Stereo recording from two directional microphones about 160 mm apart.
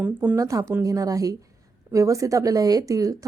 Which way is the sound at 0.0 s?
10° right (ahead or behind).